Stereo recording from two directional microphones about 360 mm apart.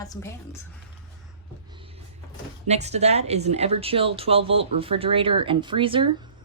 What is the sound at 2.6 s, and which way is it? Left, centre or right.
Speech, centre.